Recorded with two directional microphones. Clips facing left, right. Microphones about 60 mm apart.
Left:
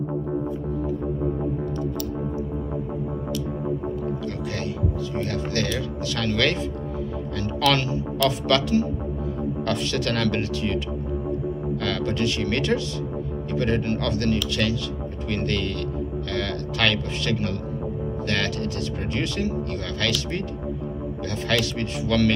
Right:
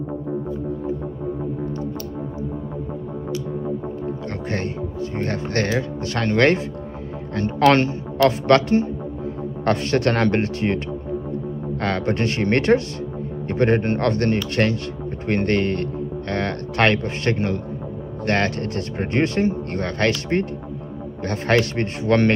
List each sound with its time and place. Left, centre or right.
5.2 s speech: right
11.8 s speech: right
21.5 s speech: right